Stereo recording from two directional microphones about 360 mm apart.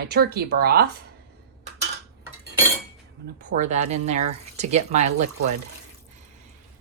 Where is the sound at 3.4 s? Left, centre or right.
Centre.